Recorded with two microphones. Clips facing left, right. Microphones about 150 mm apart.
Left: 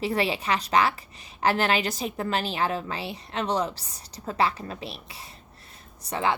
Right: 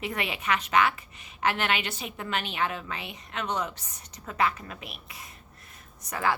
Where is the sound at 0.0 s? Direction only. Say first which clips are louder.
Left 6 dB; 30° left (ahead or behind).